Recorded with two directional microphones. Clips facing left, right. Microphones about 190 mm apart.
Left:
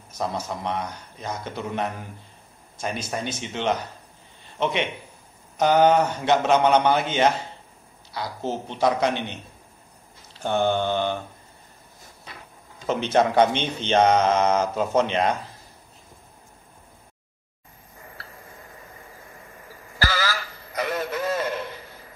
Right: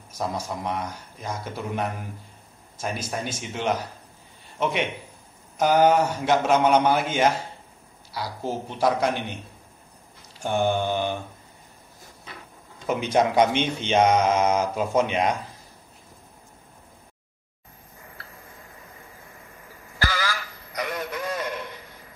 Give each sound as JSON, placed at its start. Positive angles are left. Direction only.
{"t": 0.1, "sound": "speech", "side_deg": -10}
{"t": 5.6, "sound": "speech", "side_deg": -10}
{"t": 8.5, "sound": "speech", "side_deg": -5}
{"t": 10.4, "sound": "speech", "side_deg": -10}
{"t": 12.8, "sound": "speech", "side_deg": -10}
{"t": 20.1, "sound": "a sound", "side_deg": 30}